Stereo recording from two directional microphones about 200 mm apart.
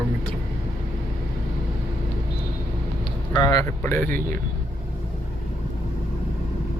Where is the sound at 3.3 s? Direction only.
20° left (ahead or behind).